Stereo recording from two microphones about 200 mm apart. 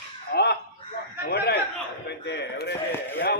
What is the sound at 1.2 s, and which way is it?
Speech, 55° left (ahead or behind).